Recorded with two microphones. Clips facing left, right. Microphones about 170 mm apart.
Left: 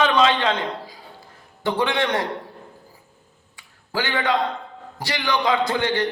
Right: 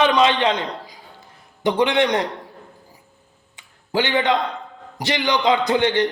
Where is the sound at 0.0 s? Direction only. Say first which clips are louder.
Right 2 dB; 20° right (ahead or behind).